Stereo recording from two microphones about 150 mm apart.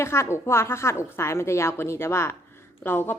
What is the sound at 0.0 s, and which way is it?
Speech, 15° left (ahead or behind).